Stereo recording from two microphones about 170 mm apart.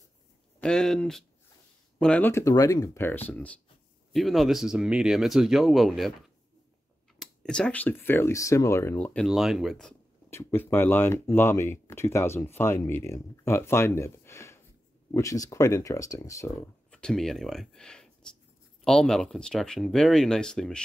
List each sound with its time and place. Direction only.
0.6 s speech: 5° left (ahead or behind)
10.3 s speech: 15° left (ahead or behind)
16.9 s speech: 5° left (ahead or behind)